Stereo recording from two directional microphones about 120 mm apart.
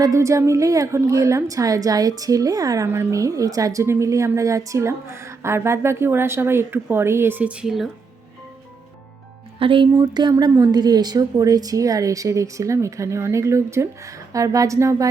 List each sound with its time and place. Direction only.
0.0 s a woman's voice: 25° right (ahead or behind); by 7.9 s 5° right (ahead or behind)
9.6 s speech: 45° right (ahead or behind)
9.9 s a sound: 35° right (ahead or behind)
10.5 s a woman's voice: 30° right (ahead or behind)